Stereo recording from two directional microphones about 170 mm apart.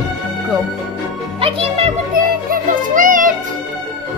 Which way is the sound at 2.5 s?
50° right (ahead or behind).